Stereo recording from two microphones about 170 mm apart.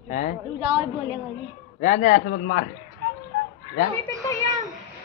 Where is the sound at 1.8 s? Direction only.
50° left (ahead or behind).